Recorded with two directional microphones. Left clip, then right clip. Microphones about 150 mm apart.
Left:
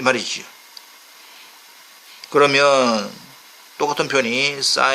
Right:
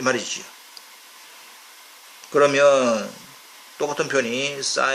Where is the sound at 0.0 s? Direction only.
45° left (ahead or behind).